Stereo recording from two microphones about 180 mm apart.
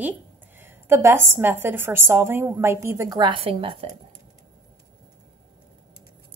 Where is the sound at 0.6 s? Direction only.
15° right (ahead or behind); by 3.7 s 30° right (ahead or behind).